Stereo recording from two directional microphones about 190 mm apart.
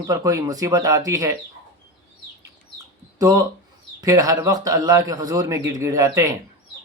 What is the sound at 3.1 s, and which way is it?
Speech, 15° right (ahead or behind).